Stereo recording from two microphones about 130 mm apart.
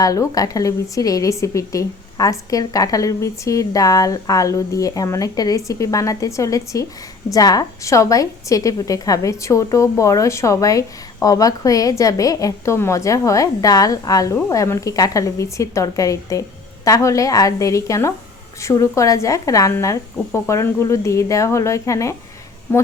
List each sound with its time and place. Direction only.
0.0 s a woman's voice: 25° left (ahead or behind)